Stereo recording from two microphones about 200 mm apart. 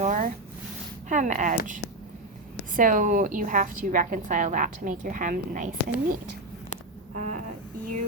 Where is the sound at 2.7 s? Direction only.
40° right (ahead or behind).